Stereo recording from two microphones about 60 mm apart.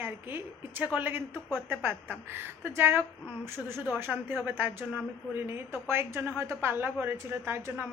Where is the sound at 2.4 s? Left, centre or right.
Right.